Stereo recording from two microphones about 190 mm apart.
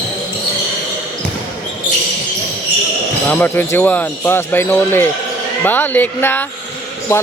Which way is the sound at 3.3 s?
10° left (ahead or behind).